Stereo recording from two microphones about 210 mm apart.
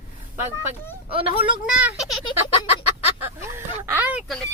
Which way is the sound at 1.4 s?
5° right (ahead or behind).